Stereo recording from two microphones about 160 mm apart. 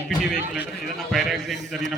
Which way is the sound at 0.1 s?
5° right (ahead or behind).